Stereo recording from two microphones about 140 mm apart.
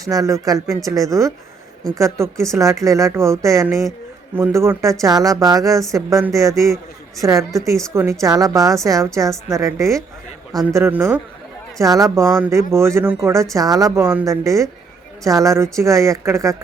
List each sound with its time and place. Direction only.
0.0 s speech: 25° right (ahead or behind)
10.5 s a man's voice: centre (ahead or behind)
10.8 s speech: 20° right (ahead or behind)